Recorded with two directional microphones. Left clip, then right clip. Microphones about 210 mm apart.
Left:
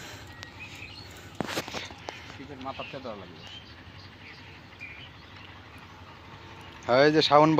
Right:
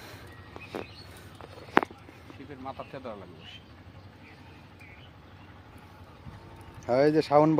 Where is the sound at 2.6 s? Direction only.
30° left (ahead or behind).